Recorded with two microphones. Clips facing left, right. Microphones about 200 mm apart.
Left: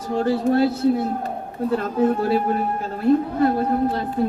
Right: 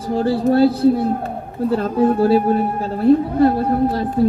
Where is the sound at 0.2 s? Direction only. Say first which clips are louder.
Right 4 dB; 35° right (ahead or behind).